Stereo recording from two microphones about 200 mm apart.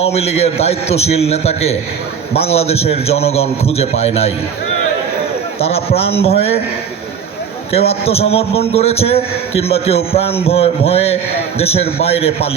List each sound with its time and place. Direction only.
0.0 s a man's voice: 30° left (ahead or behind)
5.5 s a man's voice: 30° left (ahead or behind)
7.7 s a man's voice: 30° left (ahead or behind)